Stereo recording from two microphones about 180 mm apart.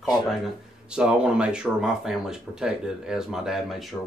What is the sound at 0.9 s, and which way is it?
Speech, 5° right (ahead or behind).